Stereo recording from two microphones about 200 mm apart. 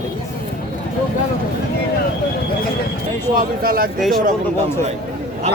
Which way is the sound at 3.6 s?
45° right (ahead or behind).